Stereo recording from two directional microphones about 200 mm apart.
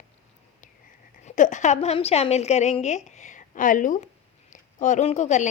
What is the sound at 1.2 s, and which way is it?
Speech, 35° left (ahead or behind).